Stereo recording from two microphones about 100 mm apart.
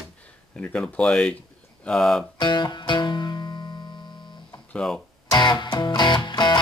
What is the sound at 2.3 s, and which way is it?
Music, 50° left (ahead or behind).